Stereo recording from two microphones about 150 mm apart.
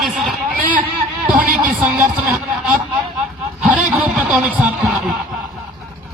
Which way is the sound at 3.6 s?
10° right (ahead or behind).